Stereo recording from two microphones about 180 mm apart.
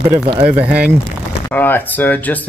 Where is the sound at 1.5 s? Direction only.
10° left (ahead or behind).